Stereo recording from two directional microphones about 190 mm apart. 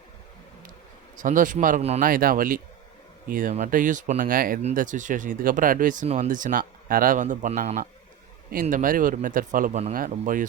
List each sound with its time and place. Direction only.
1.1 s speech: 45° right (ahead or behind)